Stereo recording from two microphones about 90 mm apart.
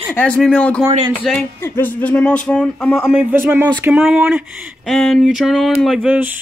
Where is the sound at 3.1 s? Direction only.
20° right (ahead or behind).